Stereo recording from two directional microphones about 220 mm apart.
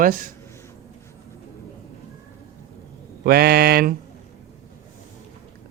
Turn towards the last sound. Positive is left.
turn(degrees=-45)  # may be behind; listen again after turning